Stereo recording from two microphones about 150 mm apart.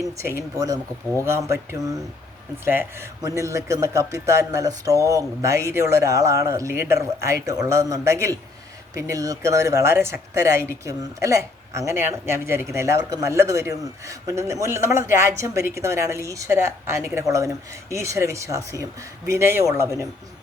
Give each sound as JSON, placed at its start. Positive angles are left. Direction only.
{"t": 0.0, "sound": "speech", "side_deg": -20}